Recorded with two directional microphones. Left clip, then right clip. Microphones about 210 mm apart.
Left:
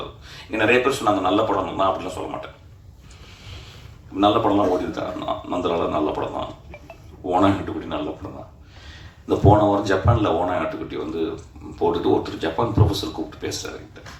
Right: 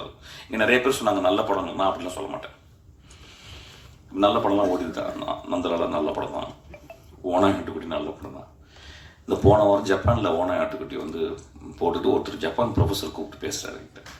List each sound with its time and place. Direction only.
0.3 s speech: 55° right (ahead or behind)
4.2 s speech: 55° right (ahead or behind)